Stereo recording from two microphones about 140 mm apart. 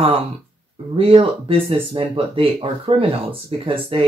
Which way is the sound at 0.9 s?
40° right (ahead or behind).